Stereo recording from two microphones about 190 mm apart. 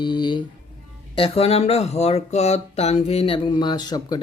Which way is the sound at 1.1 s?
30° left (ahead or behind).